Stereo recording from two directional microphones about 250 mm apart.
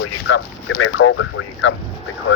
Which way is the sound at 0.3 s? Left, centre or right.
Left.